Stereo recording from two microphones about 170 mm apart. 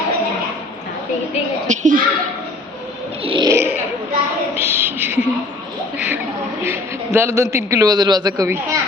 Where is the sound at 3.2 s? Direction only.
30° right (ahead or behind).